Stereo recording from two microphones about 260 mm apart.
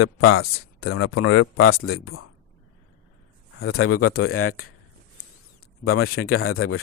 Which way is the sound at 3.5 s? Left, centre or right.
Left.